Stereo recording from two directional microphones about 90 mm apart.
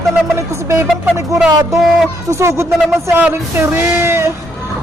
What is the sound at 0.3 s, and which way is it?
Speech, 30° right (ahead or behind).